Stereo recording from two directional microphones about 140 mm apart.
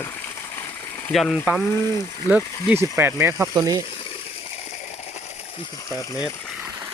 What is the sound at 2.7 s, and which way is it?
Speech, 15° right (ahead or behind).